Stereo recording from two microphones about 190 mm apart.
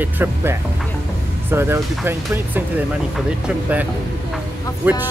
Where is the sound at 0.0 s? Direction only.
10° right (ahead or behind).